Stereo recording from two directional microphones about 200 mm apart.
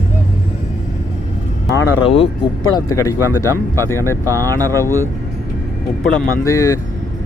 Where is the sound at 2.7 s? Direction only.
15° left (ahead or behind).